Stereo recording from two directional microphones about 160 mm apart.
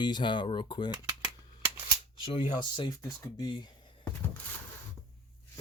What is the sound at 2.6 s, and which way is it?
Speech, 25° left (ahead or behind).